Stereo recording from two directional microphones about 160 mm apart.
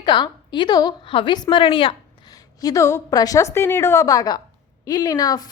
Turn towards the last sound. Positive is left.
turn(degrees=25)  # may be behind; listen again after turning